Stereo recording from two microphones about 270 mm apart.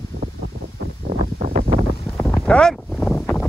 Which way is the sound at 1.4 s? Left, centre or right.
Right.